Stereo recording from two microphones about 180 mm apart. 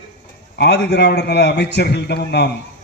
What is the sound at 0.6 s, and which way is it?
A man's voice, 70° left (ahead or behind).